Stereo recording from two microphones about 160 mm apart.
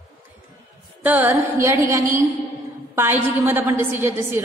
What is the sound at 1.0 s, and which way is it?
A woman's voice, 10° right (ahead or behind).